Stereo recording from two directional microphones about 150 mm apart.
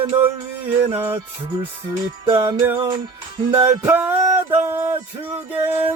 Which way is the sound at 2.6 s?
15° right (ahead or behind).